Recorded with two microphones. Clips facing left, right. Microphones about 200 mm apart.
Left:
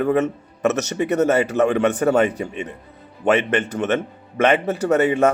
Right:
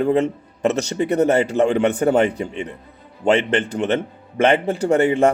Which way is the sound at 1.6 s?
25° right (ahead or behind).